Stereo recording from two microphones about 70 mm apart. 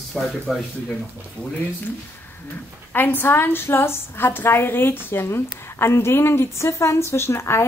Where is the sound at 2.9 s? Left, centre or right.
Left.